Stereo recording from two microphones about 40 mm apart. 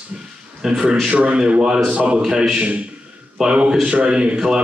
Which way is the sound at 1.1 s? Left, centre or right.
Right.